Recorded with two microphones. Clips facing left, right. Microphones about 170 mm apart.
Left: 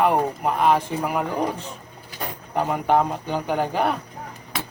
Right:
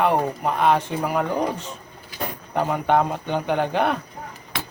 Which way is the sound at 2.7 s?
5° left (ahead or behind).